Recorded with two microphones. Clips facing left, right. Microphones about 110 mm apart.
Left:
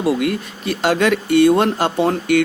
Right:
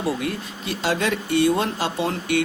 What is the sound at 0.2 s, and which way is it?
Speech, 65° left (ahead or behind).